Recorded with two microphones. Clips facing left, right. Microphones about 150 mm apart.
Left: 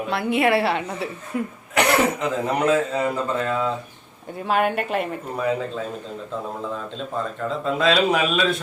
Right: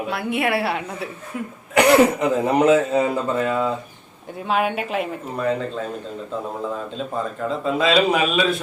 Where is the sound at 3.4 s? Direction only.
5° right (ahead or behind).